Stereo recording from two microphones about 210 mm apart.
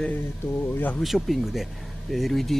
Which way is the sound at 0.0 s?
10° left (ahead or behind).